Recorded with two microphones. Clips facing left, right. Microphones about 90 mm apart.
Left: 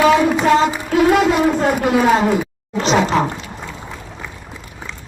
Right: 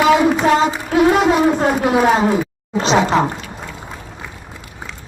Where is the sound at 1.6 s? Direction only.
5° right (ahead or behind).